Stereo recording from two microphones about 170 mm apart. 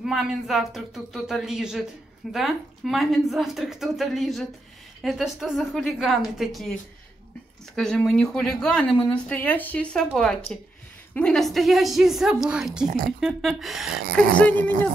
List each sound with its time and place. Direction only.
0.0 s speech: centre (ahead or behind)
7.7 s speech: 5° left (ahead or behind)
12.8 s speech: 55° right (ahead or behind)
13.2 s speech: centre (ahead or behind)
14.4 s speech: 10° left (ahead or behind)